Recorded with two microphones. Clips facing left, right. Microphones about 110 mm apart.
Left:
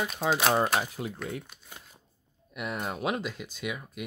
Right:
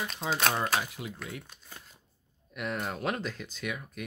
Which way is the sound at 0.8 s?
40° left (ahead or behind).